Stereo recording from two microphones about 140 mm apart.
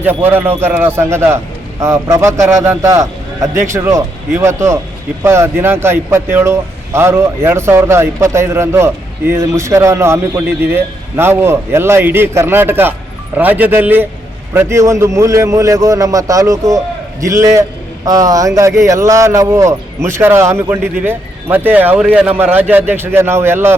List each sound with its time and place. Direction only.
0.0 s a man's voice: 15° right (ahead or behind)